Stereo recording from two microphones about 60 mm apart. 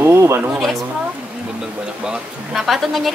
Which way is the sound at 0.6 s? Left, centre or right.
Centre.